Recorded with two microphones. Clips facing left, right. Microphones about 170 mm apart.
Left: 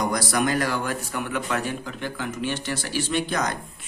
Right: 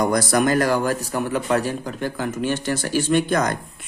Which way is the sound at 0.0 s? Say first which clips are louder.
Right 5 dB; 50° right (ahead or behind).